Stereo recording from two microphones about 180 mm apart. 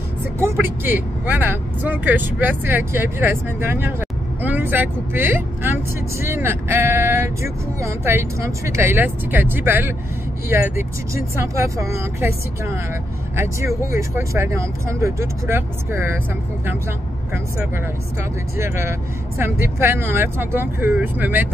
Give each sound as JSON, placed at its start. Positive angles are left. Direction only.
{"t": 0.4, "sound": "speech", "side_deg": -15}
{"t": 18.6, "sound": "speech", "side_deg": -15}